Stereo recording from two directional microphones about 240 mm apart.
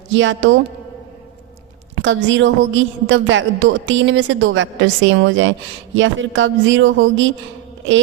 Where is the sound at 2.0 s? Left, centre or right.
Right.